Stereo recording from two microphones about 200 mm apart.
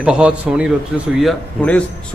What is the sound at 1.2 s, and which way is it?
Speech, 5° left (ahead or behind).